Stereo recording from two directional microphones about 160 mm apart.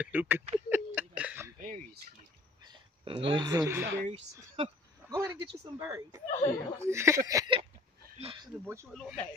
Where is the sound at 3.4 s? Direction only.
20° right (ahead or behind).